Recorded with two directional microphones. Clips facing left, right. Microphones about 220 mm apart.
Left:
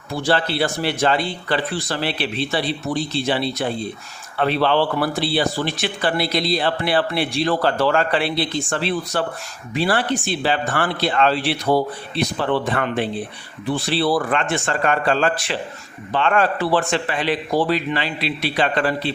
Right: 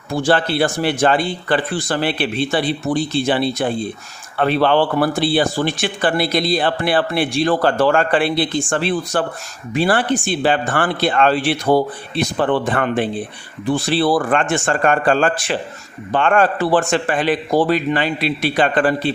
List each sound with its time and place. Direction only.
0.1 s speech: 50° right (ahead or behind)